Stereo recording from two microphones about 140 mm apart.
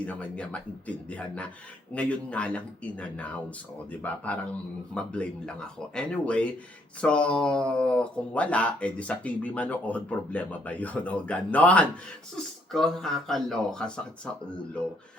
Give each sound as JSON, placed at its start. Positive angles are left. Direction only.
{"t": 0.0, "sound": "speech", "side_deg": 10}